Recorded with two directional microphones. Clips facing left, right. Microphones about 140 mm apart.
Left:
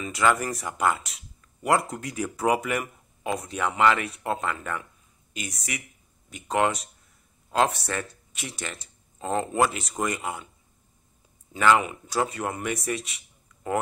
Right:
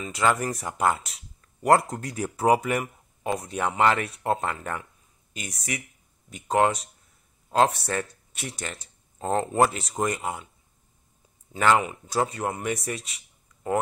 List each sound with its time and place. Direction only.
0.0 s speech: 25° right (ahead or behind)
11.5 s speech: 30° right (ahead or behind)